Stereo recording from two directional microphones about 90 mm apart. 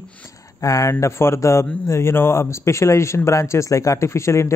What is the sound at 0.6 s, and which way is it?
Speech, 35° left (ahead or behind).